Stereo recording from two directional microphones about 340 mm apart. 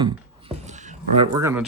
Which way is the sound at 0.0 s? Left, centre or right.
Centre.